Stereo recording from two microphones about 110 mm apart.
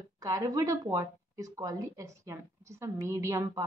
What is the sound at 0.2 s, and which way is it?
Speech, 30° right (ahead or behind).